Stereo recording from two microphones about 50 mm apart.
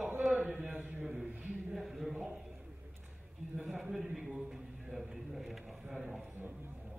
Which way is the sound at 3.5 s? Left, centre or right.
Centre.